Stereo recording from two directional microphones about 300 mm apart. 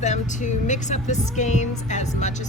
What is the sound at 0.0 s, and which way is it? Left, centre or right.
Speech, left.